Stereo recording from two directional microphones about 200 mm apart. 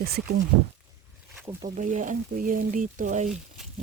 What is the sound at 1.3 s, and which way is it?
Speech, 15° right (ahead or behind).